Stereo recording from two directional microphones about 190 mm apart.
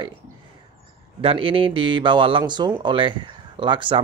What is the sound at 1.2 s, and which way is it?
Speech, 30° right (ahead or behind).